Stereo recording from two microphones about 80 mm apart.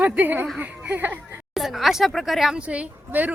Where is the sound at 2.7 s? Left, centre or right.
Centre.